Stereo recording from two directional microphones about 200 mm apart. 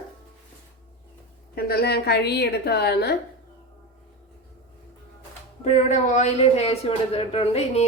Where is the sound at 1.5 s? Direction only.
50° left (ahead or behind).